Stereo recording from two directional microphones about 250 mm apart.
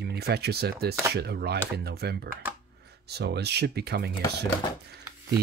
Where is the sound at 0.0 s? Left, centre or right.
Right.